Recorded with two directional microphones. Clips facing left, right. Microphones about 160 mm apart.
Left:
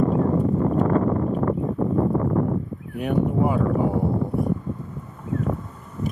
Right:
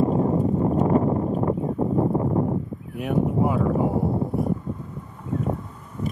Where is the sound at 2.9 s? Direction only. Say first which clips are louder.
Left 1 dB; centre (ahead or behind).